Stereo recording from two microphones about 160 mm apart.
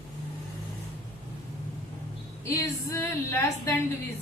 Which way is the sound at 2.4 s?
20° left (ahead or behind).